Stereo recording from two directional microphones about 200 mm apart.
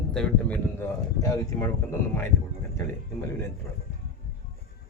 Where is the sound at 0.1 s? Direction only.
5° left (ahead or behind).